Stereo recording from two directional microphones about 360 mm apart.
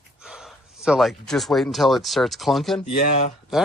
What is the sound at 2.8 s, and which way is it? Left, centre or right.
Speech, centre.